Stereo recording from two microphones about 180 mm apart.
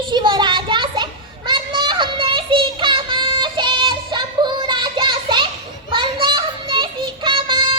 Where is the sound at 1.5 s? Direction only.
25° right (ahead or behind).